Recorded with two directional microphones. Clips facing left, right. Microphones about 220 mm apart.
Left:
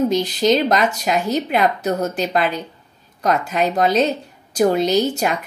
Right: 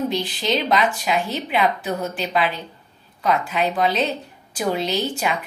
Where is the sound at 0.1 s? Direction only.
40° left (ahead or behind).